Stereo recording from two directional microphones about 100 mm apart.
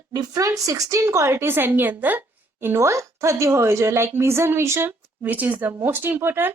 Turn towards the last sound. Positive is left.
turn(degrees=-20)  # may be behind; listen again after turning